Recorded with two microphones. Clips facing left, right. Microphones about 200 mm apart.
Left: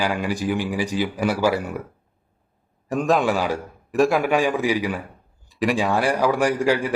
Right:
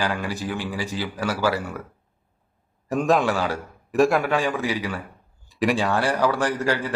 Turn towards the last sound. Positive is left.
turn(degrees=10)  # may be behind; listen again after turning